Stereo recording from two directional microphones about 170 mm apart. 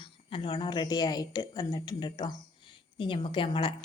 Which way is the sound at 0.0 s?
30° left (ahead or behind).